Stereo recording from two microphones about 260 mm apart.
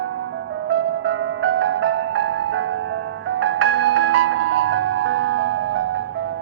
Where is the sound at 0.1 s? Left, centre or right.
Right.